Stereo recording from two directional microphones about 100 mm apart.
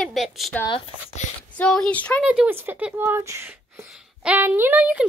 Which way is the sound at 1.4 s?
10° left (ahead or behind).